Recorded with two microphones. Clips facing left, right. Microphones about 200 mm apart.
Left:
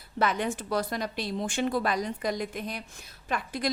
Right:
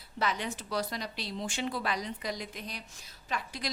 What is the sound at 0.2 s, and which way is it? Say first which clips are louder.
A woman's voice: left 6 dB; 50° left (ahead or behind).